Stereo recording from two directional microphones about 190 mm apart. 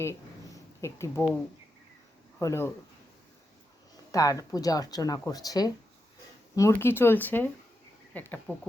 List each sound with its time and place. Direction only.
0.0 s a sound: 15° left (ahead or behind)
2.4 s speech: 15° left (ahead or behind)
4.1 s speech: 20° left (ahead or behind)